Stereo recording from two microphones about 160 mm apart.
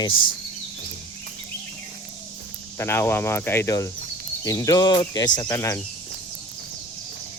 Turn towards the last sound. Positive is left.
turn(degrees=20)  # may be behind; listen again after turning